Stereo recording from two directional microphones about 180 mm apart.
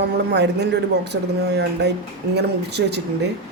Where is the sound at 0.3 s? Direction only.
70° right (ahead or behind).